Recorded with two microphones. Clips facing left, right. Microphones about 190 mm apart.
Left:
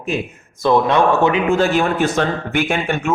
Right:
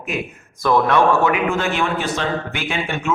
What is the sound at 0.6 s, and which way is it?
A man's voice, 20° left (ahead or behind).